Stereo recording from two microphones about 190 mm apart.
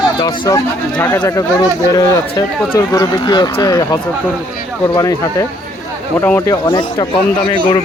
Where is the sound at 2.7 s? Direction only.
20° left (ahead or behind).